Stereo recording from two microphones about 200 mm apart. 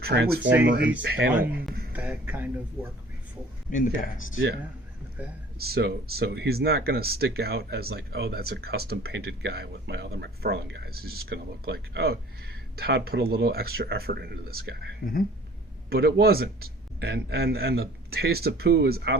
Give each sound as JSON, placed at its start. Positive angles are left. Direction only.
{"t": 0.0, "sound": "speech", "side_deg": -50}
{"t": 1.9, "sound": "speech", "side_deg": -10}
{"t": 3.7, "sound": "speech", "side_deg": 40}
{"t": 5.5, "sound": "speech", "side_deg": -50}